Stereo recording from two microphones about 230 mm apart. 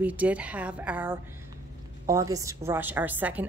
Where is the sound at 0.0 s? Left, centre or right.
Centre.